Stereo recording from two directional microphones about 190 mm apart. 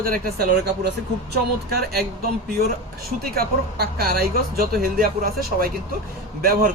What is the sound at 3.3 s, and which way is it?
Speech, 55° right (ahead or behind).